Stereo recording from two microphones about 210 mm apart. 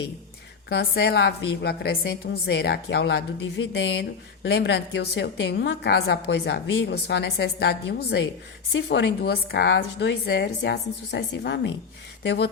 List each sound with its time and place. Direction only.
0.7 s a woman's voice: 55° left (ahead or behind)